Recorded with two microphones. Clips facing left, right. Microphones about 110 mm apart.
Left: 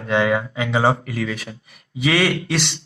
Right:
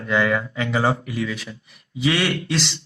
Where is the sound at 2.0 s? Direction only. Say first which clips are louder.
Left 2 dB; 60° left (ahead or behind).